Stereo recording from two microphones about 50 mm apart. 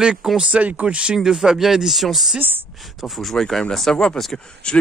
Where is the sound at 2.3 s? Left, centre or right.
Right.